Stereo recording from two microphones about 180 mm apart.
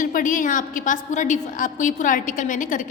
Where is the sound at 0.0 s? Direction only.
50° left (ahead or behind).